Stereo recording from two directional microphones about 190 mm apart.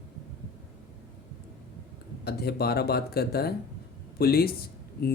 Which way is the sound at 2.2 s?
55° left (ahead or behind).